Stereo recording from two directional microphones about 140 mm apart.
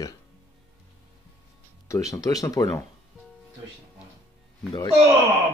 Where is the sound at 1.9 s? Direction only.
25° left (ahead or behind).